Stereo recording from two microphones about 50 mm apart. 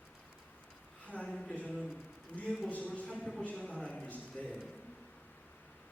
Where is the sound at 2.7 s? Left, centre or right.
Left.